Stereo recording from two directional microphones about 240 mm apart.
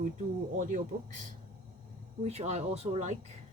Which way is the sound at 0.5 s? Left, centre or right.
Right.